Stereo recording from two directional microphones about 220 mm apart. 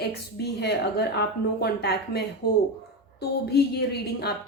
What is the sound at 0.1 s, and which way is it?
A woman's voice, 45° left (ahead or behind).